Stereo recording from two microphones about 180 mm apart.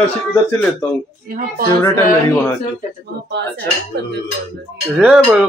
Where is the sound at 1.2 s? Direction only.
55° right (ahead or behind).